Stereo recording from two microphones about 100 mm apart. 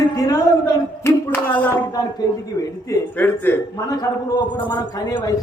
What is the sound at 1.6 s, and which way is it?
Speech, 15° left (ahead or behind).